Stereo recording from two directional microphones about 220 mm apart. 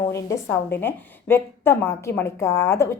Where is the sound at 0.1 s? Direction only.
15° left (ahead or behind).